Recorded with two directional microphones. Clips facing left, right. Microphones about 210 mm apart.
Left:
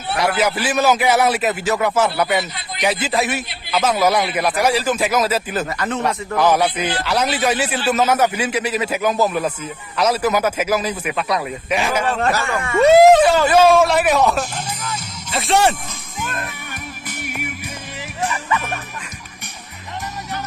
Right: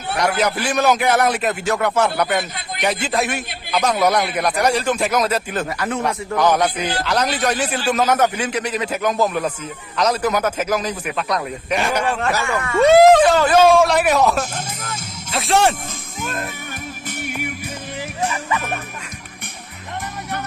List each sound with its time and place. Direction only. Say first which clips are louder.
0.1 s a man's voice: left 1 dB; 5° left (ahead or behind)
2.4 s a man's voice: even; 50° right (ahead or behind)
2.8 s a man's voice: left 1 dB; 5° left (ahead or behind)
5.7 s speech: even; 10° right (ahead or behind)
6.3 s a man's voice: left 1 dB; 5° left (ahead or behind)
14.5 s music: left 1 dB; 45° right (ahead or behind)
15.3 s a man's voice: even; centre (ahead or behind)